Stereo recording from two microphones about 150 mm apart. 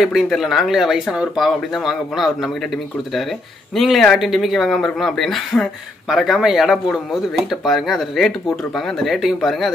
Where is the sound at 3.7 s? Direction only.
Centre (ahead or behind).